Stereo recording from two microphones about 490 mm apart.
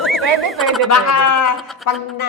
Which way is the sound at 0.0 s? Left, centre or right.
Centre.